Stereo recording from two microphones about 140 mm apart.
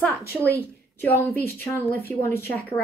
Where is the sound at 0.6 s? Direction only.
15° left (ahead or behind).